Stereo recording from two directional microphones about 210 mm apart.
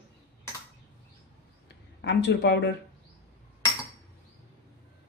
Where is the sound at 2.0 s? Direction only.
55° left (ahead or behind).